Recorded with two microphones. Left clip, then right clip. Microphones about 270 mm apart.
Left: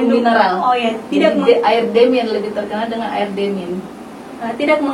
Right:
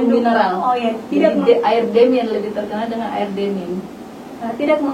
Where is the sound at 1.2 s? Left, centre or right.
Centre.